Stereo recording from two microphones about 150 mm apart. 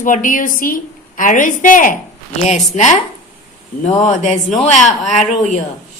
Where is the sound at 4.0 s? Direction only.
55° left (ahead or behind).